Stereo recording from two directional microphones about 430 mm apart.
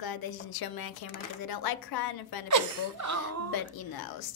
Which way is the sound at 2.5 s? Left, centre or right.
Right.